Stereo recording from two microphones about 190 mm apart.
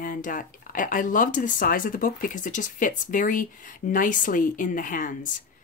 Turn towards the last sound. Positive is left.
turn(degrees=45)  # may be behind; listen again after turning